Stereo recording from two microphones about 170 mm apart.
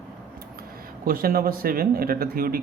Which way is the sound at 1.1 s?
55° right (ahead or behind).